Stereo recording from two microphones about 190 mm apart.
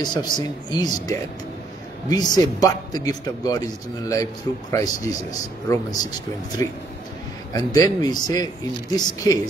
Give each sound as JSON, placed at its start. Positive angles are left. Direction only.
{"t": 0.0, "sound": "a man's voice", "side_deg": 20}
{"t": 7.5, "sound": "a man's voice", "side_deg": 20}